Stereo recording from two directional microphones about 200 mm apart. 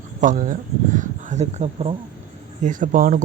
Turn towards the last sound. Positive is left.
turn(degrees=-40)  # may be behind; listen again after turning